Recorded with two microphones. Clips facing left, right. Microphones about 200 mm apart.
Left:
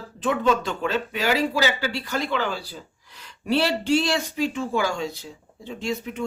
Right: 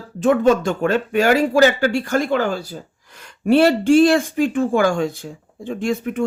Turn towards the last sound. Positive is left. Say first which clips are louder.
# right 7 dB
turn(degrees=-50)  # may be behind; listen again after turning